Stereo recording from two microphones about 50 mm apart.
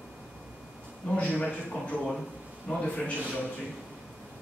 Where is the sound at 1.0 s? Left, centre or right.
Left.